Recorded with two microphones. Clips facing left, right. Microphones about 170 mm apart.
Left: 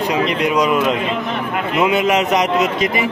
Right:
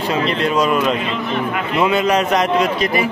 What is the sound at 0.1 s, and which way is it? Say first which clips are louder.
A man's voice: right 1 dB; 15° left (ahead or behind).